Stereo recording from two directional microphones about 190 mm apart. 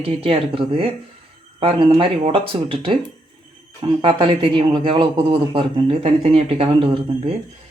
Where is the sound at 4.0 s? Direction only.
25° right (ahead or behind).